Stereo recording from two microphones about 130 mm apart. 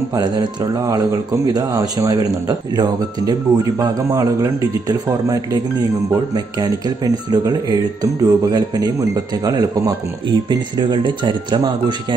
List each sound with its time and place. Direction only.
0.1 s speech: 35° right (ahead or behind)